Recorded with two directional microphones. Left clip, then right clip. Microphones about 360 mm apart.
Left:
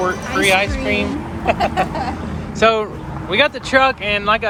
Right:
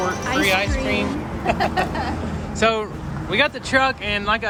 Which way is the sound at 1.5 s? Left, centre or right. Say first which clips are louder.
Left 3 dB; centre.